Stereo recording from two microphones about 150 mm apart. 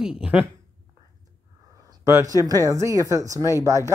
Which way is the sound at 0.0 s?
5° right (ahead or behind).